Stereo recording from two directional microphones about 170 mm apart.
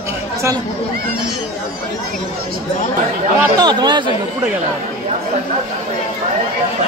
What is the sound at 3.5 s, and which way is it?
Speech, 25° right (ahead or behind).